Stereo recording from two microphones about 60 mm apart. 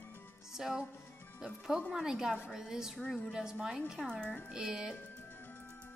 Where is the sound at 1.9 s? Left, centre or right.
Centre.